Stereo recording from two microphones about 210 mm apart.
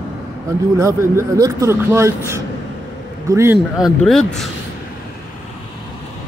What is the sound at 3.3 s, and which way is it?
Speech, 10° right (ahead or behind).